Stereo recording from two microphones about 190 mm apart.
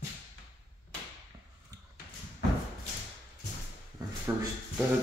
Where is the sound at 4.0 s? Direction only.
20° right (ahead or behind).